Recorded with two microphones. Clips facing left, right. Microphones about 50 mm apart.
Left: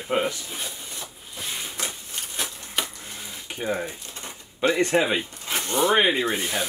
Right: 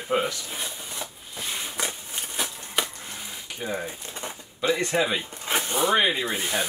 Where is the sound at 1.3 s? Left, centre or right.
Centre.